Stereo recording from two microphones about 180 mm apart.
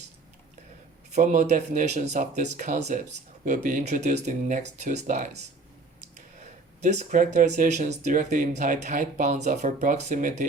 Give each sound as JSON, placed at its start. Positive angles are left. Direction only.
{"t": 1.1, "sound": "speech", "side_deg": -45}
{"t": 6.8, "sound": "speech", "side_deg": -40}